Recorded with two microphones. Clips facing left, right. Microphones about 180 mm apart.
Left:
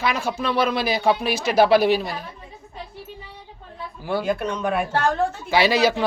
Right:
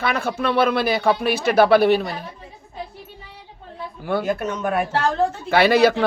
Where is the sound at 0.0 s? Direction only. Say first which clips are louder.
Right 2 dB; 60° right (ahead or behind).